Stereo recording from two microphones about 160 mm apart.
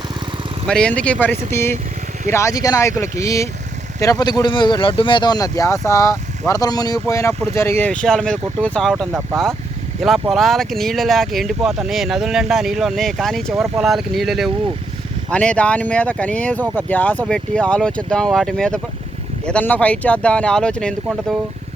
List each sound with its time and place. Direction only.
0.7 s speech: 5° left (ahead or behind)